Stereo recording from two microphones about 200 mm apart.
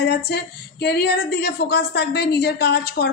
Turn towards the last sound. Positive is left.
turn(degrees=55)  # may be behind; listen again after turning